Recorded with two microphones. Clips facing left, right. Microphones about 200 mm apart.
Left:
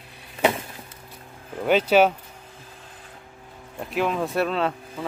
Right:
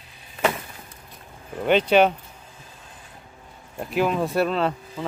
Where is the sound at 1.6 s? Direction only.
5° left (ahead or behind).